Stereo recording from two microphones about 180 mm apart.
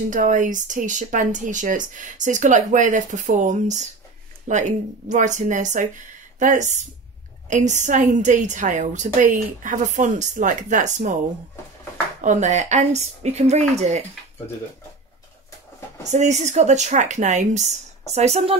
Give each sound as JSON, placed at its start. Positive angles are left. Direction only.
{"t": 0.1, "sound": "speech", "side_deg": -45}
{"t": 12.2, "sound": "speech", "side_deg": -45}
{"t": 16.1, "sound": "speech", "side_deg": -40}